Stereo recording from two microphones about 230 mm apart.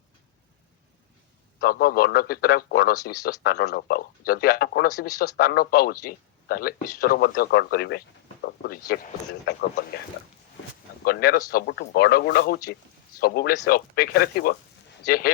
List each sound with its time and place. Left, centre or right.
1.6 s speech: left
3.0 s speech: centre
3.4 s speech: left
11.0 s speech: left